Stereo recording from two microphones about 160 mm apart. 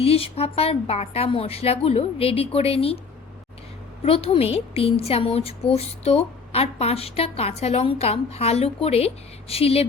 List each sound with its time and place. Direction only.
0.0 s a woman's voice: 40° left (ahead or behind)
4.0 s a woman's voice: 35° left (ahead or behind)